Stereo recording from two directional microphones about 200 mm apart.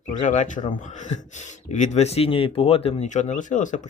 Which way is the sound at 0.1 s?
40° left (ahead or behind).